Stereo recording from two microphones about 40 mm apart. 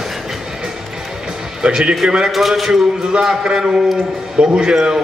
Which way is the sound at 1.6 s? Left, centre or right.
Right.